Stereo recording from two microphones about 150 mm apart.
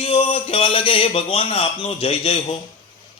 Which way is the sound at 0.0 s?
40° left (ahead or behind).